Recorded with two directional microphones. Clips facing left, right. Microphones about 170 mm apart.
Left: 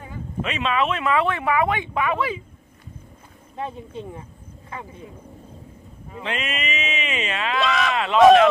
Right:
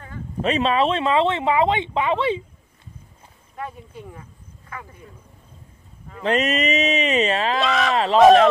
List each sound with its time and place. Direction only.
0.4 s speech: 35° right (ahead or behind)
3.5 s speech: 25° left (ahead or behind)
6.2 s speech: 40° right (ahead or behind)
7.6 s speech: centre (ahead or behind)